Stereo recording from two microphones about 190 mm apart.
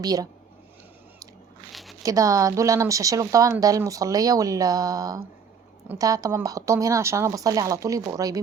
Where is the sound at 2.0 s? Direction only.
20° right (ahead or behind).